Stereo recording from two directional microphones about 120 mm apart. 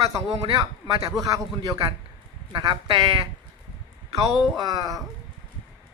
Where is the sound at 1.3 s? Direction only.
30° right (ahead or behind).